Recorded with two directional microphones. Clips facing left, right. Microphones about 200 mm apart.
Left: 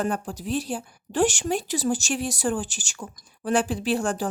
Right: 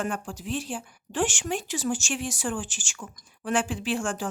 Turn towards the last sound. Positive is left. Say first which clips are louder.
# left 4 dB
turn(degrees=40)  # may be behind; listen again after turning